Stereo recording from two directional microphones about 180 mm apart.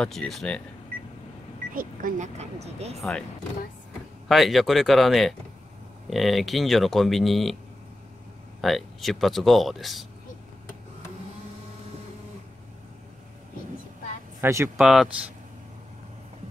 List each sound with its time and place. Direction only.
0.0 s speech: 5° left (ahead or behind)
1.7 s speech: 50° right (ahead or behind)
3.0 s speech: 5° left (ahead or behind)
4.3 s speech: centre (ahead or behind)
8.5 s speech: centre (ahead or behind)
14.4 s speech: 15° right (ahead or behind)
14.8 s speech: 5° right (ahead or behind)